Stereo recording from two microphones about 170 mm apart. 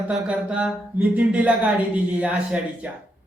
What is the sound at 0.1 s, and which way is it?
A man's voice, 5° right (ahead or behind).